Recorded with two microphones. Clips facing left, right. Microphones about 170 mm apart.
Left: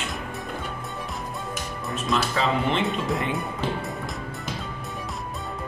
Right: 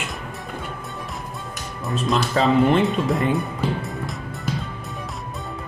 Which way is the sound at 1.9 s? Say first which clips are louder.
Right 4 dB; 40° right (ahead or behind).